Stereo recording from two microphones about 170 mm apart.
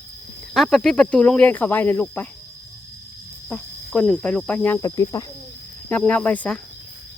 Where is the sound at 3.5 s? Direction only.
5° left (ahead or behind).